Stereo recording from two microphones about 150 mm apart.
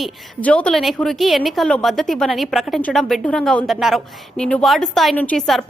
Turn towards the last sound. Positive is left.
turn(degrees=5)  # may be behind; listen again after turning